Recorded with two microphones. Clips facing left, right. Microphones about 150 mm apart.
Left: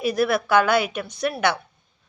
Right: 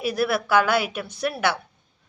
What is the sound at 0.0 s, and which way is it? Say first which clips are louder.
A woman's voice: left 2 dB; 5° right (ahead or behind).